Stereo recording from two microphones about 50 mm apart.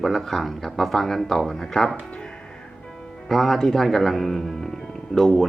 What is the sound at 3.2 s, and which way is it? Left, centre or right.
A man's voice, centre.